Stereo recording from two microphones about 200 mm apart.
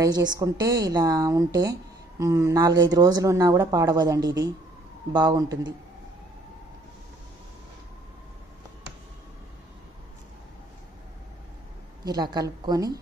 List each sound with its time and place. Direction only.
0.0 s a woman's voice: 20° right (ahead or behind)
12.0 s a woman's voice: 20° right (ahead or behind)